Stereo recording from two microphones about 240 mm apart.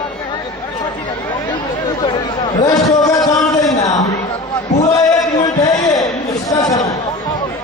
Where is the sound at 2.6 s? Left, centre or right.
Centre.